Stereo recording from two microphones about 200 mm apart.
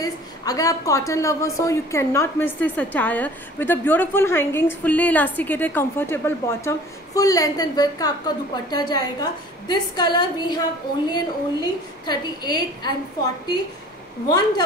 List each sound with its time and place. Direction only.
0.0 s a woman's voice: 20° left (ahead or behind)